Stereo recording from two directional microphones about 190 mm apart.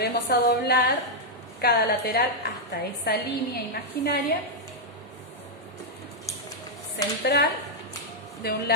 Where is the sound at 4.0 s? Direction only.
55° left (ahead or behind).